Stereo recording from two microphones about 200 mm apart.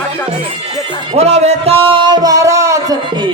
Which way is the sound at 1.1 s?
30° right (ahead or behind).